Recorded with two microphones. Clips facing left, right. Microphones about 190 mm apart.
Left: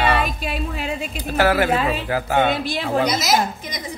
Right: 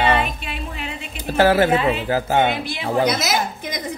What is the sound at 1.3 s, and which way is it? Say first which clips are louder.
A man's voice: right 3 dB; 25° right (ahead or behind).